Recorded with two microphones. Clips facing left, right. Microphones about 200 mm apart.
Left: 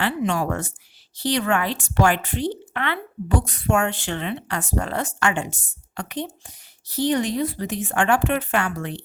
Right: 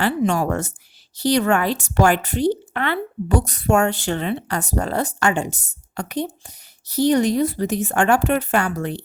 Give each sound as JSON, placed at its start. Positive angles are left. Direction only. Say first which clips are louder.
{"t": 0.0, "sound": "speech", "louder": "right 4 dB", "side_deg": -40}